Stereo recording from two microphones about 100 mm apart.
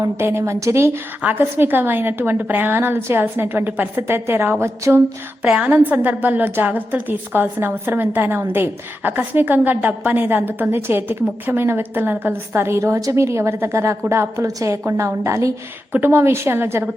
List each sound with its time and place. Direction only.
0.0 s a woman's voice: 25° right (ahead or behind)
5.4 s a woman's voice: 10° right (ahead or behind); by 16.9 s 25° right (ahead or behind)